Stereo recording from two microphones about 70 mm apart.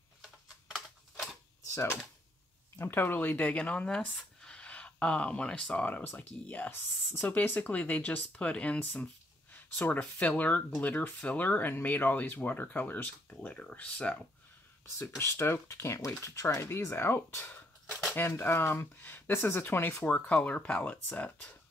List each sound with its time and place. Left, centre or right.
0.2 s typing: centre
0.8 s a sound: centre
1.7 s speech: left; by 8.7 s centre
10.1 s speech: left
15.0 s speech: left
20.1 s speech: centre